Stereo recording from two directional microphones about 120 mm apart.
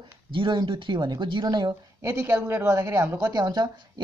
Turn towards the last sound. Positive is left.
turn(degrees=-35)  # may be behind; listen again after turning